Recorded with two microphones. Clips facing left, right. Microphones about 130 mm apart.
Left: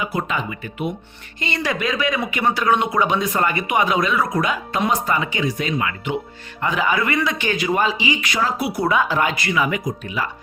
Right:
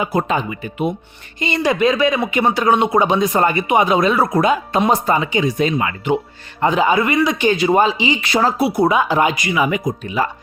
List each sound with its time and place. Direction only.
0.0 s speech: 35° right (ahead or behind)
0.5 s speech: 25° right (ahead or behind)